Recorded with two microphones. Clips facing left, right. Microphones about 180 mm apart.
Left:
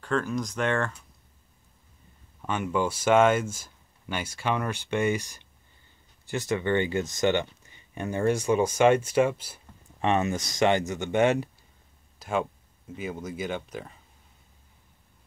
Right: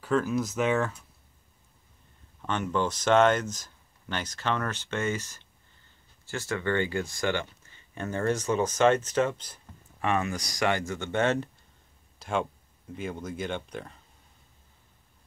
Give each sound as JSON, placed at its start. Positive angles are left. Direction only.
{"t": 0.0, "sound": "speech", "side_deg": -5}
{"t": 2.4, "sound": "speech", "side_deg": 10}
{"t": 9.9, "sound": "speech", "side_deg": 25}